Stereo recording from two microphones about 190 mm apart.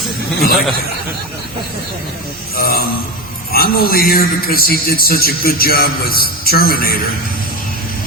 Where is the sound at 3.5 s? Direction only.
50° left (ahead or behind).